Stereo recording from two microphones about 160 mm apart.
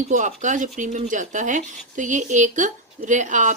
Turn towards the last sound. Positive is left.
turn(degrees=-50)  # may be behind; listen again after turning